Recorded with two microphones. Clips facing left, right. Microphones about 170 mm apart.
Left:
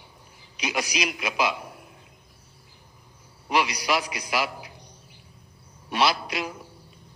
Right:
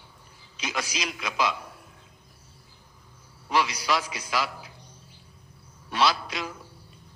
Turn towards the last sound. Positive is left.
turn(degrees=15)  # may be behind; listen again after turning